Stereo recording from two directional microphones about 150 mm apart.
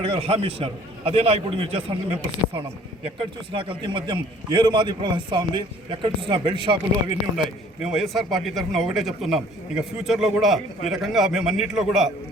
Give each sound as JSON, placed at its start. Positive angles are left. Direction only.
{"t": 0.0, "sound": "a man's voice", "side_deg": -40}
{"t": 3.2, "sound": "a man's voice", "side_deg": -35}
{"t": 7.3, "sound": "a man's voice", "side_deg": 0}